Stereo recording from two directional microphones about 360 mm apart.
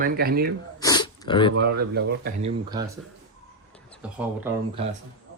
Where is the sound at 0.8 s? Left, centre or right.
Centre.